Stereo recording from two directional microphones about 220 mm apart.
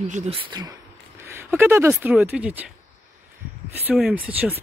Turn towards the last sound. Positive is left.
turn(degrees=-5)  # may be behind; listen again after turning